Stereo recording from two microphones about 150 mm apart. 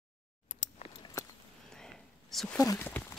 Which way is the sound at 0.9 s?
30° left (ahead or behind).